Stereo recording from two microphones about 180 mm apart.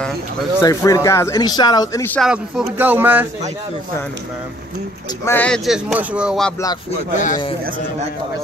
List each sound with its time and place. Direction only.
0.6 s speech: 20° left (ahead or behind)
2.1 s speech: 5° right (ahead or behind)
5.2 s speech: 10° left (ahead or behind)
7.2 s a man's voice: 45° left (ahead or behind)